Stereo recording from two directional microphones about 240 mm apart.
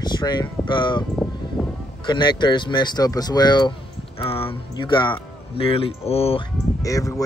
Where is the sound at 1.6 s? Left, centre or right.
Centre.